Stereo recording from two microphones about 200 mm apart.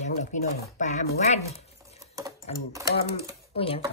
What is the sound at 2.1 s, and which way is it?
Speech, 15° right (ahead or behind).